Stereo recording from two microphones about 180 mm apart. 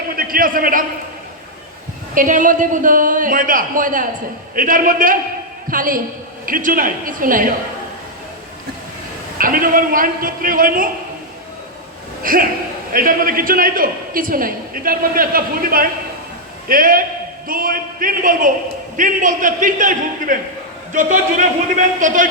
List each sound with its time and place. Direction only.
0.2 s a man's voice: 55° right (ahead or behind)
2.1 s a man's voice: 45° right (ahead or behind)
9.4 s a man's voice: 50° right (ahead or behind)
12.2 s a man's voice: 50° right (ahead or behind)